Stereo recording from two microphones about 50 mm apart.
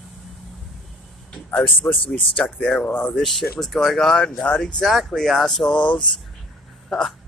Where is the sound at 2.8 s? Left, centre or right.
Left.